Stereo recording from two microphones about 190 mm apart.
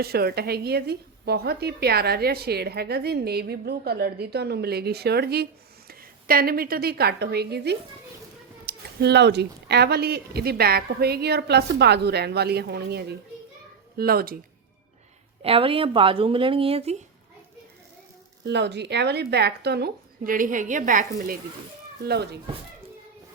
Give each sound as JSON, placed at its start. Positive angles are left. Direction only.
{"t": 0.0, "sound": "a woman's voice", "side_deg": -55}
{"t": 15.4, "sound": "speech", "side_deg": -30}
{"t": 18.4, "sound": "a woman's voice", "side_deg": -65}
{"t": 22.0, "sound": "a woman's voice", "side_deg": -60}